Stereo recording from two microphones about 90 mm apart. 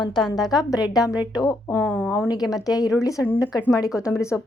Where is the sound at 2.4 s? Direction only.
5° right (ahead or behind).